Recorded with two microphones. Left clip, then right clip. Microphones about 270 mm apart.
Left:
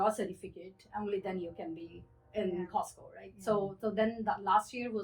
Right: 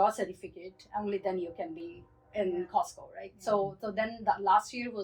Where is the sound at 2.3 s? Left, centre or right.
Centre.